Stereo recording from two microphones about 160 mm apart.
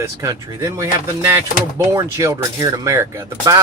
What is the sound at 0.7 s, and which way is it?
Speech, 20° right (ahead or behind).